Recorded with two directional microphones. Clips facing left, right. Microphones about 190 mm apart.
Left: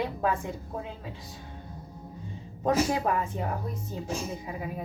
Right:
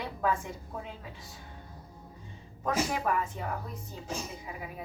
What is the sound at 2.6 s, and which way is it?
Speech, 25° left (ahead or behind).